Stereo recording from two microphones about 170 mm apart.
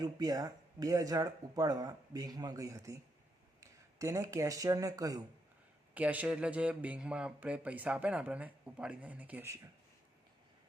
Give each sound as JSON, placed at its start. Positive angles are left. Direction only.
{"t": 0.0, "sound": "speech", "side_deg": -20}
{"t": 5.9, "sound": "a man's voice", "side_deg": -10}